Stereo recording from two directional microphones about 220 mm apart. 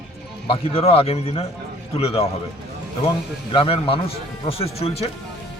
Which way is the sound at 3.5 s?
25° left (ahead or behind).